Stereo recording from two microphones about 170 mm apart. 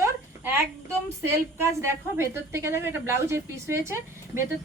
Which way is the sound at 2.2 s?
15° right (ahead or behind).